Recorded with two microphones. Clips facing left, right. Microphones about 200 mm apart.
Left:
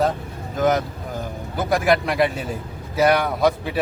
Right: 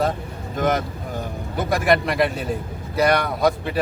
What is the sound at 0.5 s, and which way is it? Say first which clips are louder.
Speech: left 2 dB; centre (ahead or behind).